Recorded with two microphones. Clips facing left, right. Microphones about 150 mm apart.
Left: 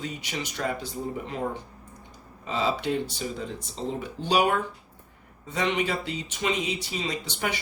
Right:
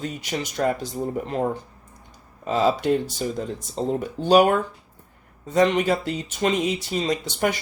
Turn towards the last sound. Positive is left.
turn(degrees=-45)  # may be behind; listen again after turning